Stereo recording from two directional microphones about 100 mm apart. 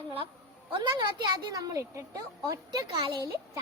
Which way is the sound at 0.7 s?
50° right (ahead or behind).